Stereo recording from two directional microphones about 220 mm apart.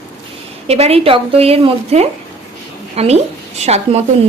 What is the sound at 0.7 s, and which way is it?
A woman's voice, 30° right (ahead or behind).